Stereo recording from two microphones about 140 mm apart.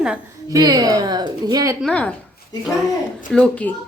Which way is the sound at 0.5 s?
25° right (ahead or behind).